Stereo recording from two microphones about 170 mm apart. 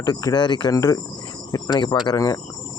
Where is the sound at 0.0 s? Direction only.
20° left (ahead or behind).